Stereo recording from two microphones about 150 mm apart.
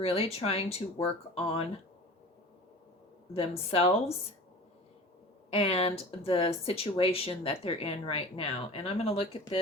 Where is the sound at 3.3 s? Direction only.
40° left (ahead or behind).